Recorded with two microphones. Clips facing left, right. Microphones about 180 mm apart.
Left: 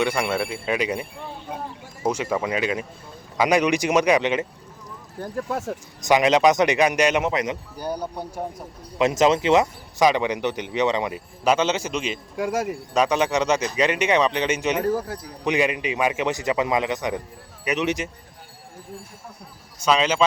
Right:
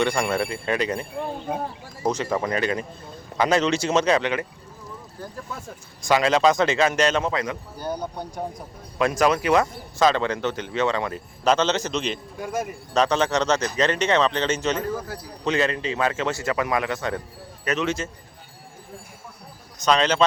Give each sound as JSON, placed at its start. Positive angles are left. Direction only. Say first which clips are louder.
{"t": 0.0, "sound": "speech", "louder": "even", "side_deg": 5}
{"t": 2.0, "sound": "speech", "louder": "even", "side_deg": 10}
{"t": 5.5, "sound": "speech", "louder": "left 9 dB", "side_deg": 80}
{"t": 6.1, "sound": "speech", "louder": "left 2 dB", "side_deg": 20}
{"t": 12.4, "sound": "speech", "louder": "left 5 dB", "side_deg": 90}
{"t": 12.9, "sound": "speech", "louder": "even", "side_deg": 10}
{"t": 14.9, "sound": "speech", "louder": "left 4 dB", "side_deg": 30}
{"t": 15.4, "sound": "speech", "louder": "left 1 dB", "side_deg": 15}
{"t": 19.8, "sound": "speech", "louder": "even", "side_deg": 5}